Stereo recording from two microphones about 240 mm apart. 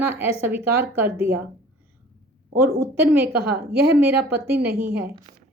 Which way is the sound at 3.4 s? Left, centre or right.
Right.